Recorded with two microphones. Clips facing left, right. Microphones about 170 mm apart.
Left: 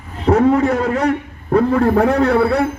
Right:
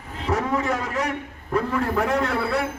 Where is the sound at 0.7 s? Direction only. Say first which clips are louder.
Left 9 dB; 60° left (ahead or behind).